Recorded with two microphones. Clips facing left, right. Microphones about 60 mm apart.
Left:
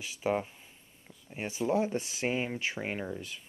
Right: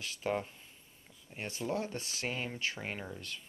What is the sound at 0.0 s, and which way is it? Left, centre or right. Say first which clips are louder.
Speech: left 4 dB; centre.